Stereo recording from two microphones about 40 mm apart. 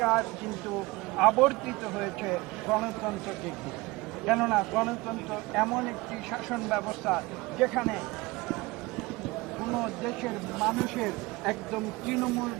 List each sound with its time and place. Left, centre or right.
0.0 s speech: centre
9.6 s speech: centre